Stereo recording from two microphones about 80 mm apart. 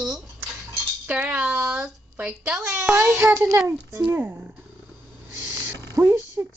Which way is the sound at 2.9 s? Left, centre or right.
Right.